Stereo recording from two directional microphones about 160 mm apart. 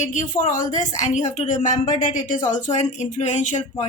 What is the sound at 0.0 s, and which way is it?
Speech, 50° left (ahead or behind).